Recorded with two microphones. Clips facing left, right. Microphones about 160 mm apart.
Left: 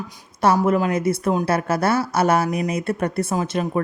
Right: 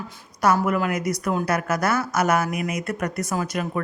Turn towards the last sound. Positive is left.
turn(degrees=25)  # may be behind; listen again after turning